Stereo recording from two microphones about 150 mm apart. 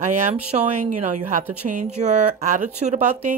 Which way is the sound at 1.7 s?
50° right (ahead or behind).